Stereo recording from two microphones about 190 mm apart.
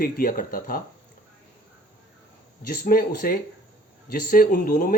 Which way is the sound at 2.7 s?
50° left (ahead or behind).